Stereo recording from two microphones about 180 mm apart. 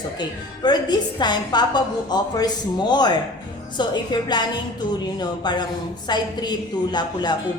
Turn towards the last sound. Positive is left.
turn(degrees=25)  # may be behind; listen again after turning